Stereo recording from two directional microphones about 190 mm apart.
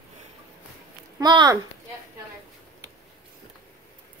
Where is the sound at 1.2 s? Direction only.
20° right (ahead or behind).